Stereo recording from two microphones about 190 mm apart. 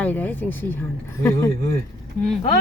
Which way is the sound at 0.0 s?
10° left (ahead or behind).